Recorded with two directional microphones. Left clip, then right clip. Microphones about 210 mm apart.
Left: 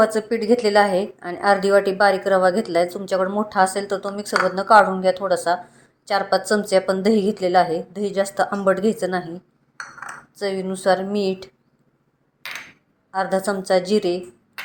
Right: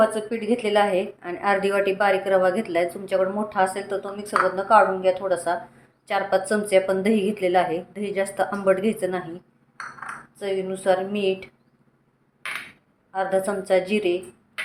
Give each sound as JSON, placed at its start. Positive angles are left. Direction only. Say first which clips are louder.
{"t": 0.0, "sound": "speech", "louder": "left 3 dB", "side_deg": 30}
{"t": 10.3, "sound": "speech", "louder": "left 2 dB", "side_deg": 30}
{"t": 13.1, "sound": "speech", "louder": "left 2 dB", "side_deg": 25}